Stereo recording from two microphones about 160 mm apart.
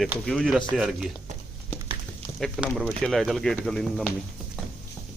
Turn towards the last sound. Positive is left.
turn(degrees=5)  # may be behind; listen again after turning